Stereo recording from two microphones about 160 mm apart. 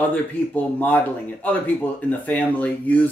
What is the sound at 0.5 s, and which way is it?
Speech, 10° left (ahead or behind).